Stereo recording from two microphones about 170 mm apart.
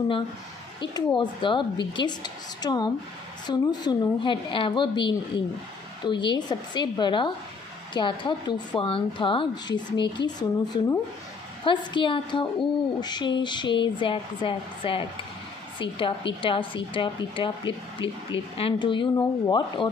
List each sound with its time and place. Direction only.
0.7 s a woman's voice: 25° left (ahead or behind)